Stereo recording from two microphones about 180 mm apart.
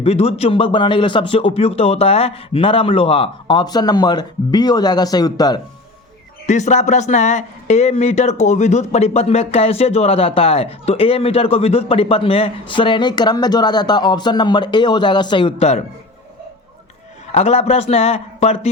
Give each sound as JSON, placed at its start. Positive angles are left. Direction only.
{"t": 0.0, "sound": "a man's voice", "side_deg": 35}
{"t": 6.4, "sound": "speech", "side_deg": 40}
{"t": 17.3, "sound": "speech", "side_deg": 40}